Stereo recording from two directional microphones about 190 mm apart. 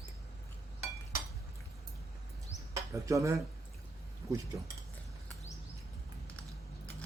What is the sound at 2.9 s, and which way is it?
Speech, 15° right (ahead or behind).